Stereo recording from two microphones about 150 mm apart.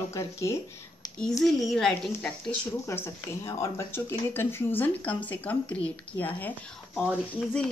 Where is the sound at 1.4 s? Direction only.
Centre (ahead or behind).